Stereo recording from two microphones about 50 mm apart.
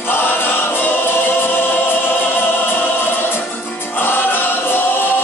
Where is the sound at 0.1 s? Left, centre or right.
Left.